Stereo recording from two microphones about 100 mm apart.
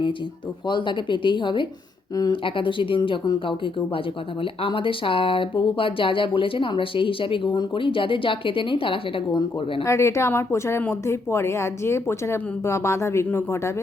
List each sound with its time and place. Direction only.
0.7 s speech: 50° left (ahead or behind)
9.8 s speech: 30° left (ahead or behind)